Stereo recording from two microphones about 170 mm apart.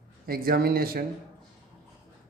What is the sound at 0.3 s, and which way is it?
Speech, 60° right (ahead or behind).